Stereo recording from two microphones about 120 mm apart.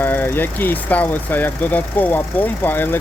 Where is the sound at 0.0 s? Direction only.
15° left (ahead or behind).